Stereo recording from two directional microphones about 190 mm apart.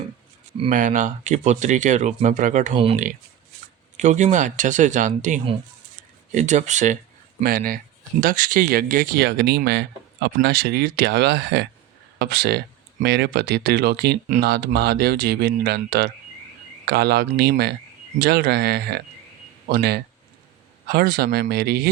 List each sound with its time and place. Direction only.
0.7 s speech: 40° right (ahead or behind)
2.7 s speech: 30° right (ahead or behind)
3.9 s a man's voice: 40° right (ahead or behind); by 21.8 s 55° right (ahead or behind)